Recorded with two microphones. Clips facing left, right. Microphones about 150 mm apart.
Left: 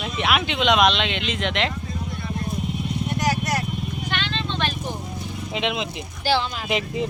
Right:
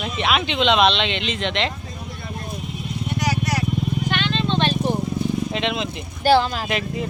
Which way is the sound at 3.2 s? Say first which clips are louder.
Right 1 dB; 50° left (ahead or behind).